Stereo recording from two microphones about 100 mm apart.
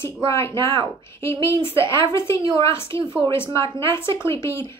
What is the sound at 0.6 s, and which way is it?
Speech, 50° right (ahead or behind).